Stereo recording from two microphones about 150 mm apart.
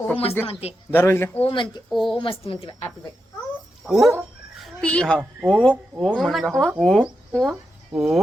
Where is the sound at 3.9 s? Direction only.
Centre (ahead or behind).